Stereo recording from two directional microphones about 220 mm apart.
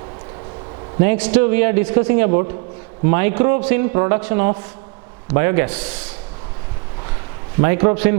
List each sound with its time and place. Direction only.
0.9 s a man's voice: 10° right (ahead or behind)
7.6 s a man's voice: 15° right (ahead or behind)